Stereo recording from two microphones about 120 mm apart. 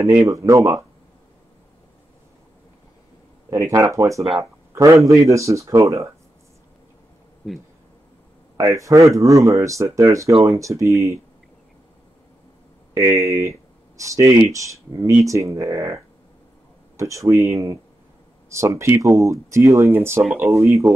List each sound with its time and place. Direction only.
0.3 s speech: 25° right (ahead or behind)
3.4 s speech: 25° right (ahead or behind)
8.5 s speech: 25° right (ahead or behind)
12.9 s speech: 25° right (ahead or behind)
20.2 s speech: 5° right (ahead or behind)
20.5 s speech: 25° right (ahead or behind)